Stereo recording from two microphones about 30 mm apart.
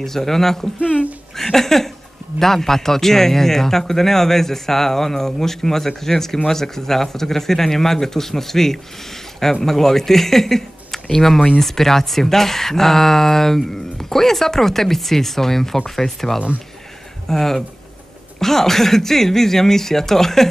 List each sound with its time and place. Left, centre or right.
0.0 s a man's voice: centre
0.7 s speech: left
1.3 s a man's voice: centre